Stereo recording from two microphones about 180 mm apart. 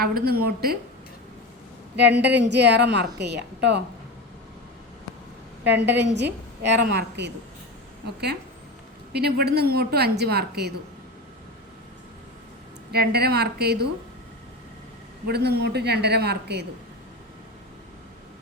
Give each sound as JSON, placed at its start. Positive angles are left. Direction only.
{"t": 0.0, "sound": "a woman's voice", "side_deg": -60}
{"t": 2.0, "sound": "a woman's voice", "side_deg": -70}
{"t": 5.6, "sound": "a woman's voice", "side_deg": -70}
{"t": 12.9, "sound": "a woman's voice", "side_deg": -60}
{"t": 15.3, "sound": "a woman's voice", "side_deg": -65}